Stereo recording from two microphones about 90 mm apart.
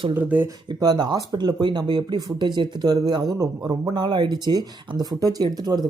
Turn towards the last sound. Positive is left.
turn(degrees=-50)  # may be behind; listen again after turning